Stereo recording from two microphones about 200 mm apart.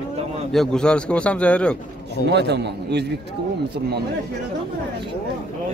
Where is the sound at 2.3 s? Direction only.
60° right (ahead or behind).